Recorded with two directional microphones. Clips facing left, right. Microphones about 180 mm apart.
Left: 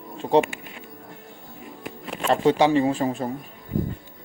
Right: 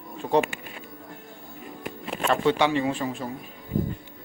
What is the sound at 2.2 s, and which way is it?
Speech, 35° left (ahead or behind).